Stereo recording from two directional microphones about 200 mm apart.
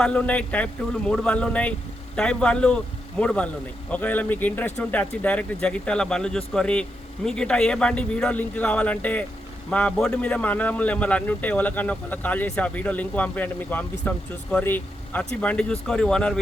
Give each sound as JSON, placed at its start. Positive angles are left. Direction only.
{"t": 0.0, "sound": "speech", "side_deg": 5}